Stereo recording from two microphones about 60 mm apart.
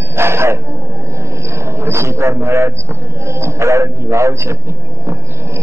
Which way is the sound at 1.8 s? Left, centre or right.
Right.